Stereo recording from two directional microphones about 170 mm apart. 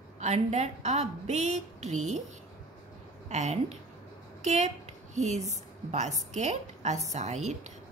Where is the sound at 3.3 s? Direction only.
40° right (ahead or behind).